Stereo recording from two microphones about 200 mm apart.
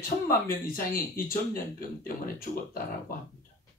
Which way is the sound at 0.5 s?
45° left (ahead or behind).